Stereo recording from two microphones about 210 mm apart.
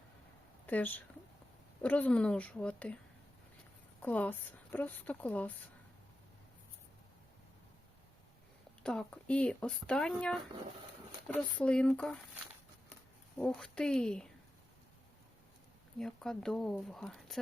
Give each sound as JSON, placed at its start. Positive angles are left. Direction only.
{"t": 0.7, "sound": "a woman's voice", "side_deg": 10}
{"t": 4.0, "sound": "a woman's voice", "side_deg": 10}
{"t": 8.8, "sound": "speech", "side_deg": 5}
{"t": 13.4, "sound": "speech", "side_deg": 5}
{"t": 16.0, "sound": "speech", "side_deg": 5}